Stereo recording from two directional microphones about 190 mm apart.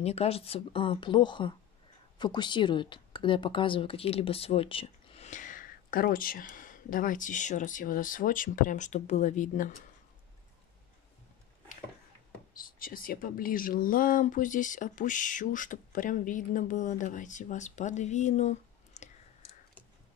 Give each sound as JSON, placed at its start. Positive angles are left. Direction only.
{"t": 0.0, "sound": "speech", "side_deg": 35}
{"t": 12.5, "sound": "speech", "side_deg": 50}